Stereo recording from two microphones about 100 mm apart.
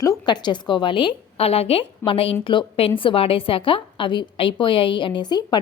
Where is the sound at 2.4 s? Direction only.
55° left (ahead or behind).